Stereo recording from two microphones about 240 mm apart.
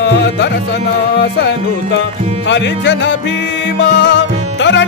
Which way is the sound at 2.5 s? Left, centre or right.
Left.